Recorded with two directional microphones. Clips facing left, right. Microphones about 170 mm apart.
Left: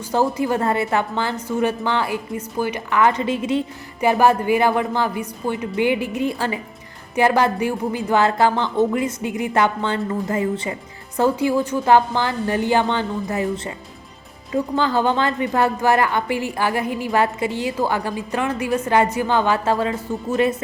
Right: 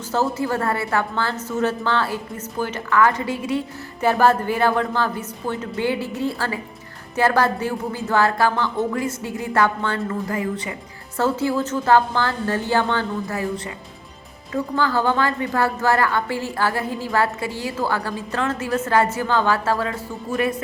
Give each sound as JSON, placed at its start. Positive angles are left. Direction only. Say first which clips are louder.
{"t": 0.1, "sound": "a woman's voice", "louder": "left 2 dB", "side_deg": 15}
{"t": 11.2, "sound": "a woman's voice", "louder": "left 3 dB", "side_deg": 15}